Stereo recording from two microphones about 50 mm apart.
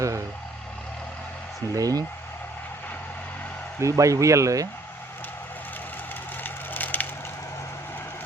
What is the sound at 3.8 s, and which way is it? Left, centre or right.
Speech, right.